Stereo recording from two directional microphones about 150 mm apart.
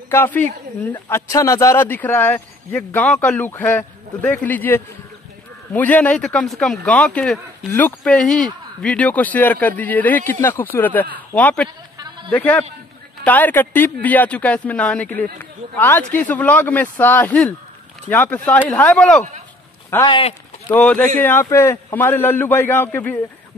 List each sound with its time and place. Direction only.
0.1 s speech: 15° left (ahead or behind)
20.1 s speech: 35° left (ahead or behind)
20.7 s speech: 10° left (ahead or behind)